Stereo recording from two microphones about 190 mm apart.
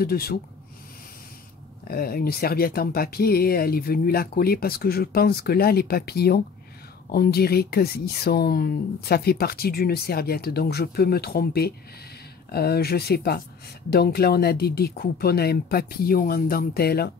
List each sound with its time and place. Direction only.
0.0 s speech: 55° left (ahead or behind)
1.9 s speech: 50° left (ahead or behind)